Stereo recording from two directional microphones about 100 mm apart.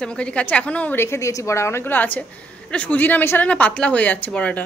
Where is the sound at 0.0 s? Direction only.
10° left (ahead or behind).